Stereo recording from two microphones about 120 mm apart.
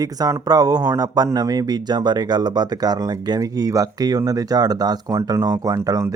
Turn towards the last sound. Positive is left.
turn(degrees=-25)  # may be behind; listen again after turning